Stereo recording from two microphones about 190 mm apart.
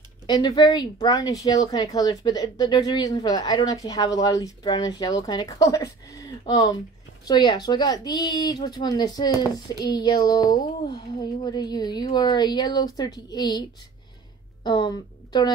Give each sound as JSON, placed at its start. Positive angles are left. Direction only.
{"t": 0.3, "sound": "a woman's voice", "side_deg": 20}